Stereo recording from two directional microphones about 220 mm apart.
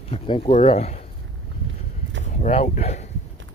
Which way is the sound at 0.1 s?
25° left (ahead or behind).